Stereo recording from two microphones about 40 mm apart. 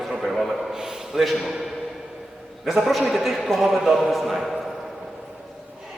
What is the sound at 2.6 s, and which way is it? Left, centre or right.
A man's voice, centre.